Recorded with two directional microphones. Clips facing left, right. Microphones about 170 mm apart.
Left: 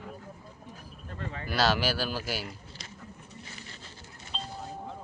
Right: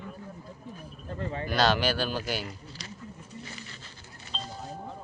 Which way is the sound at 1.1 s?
25° right (ahead or behind).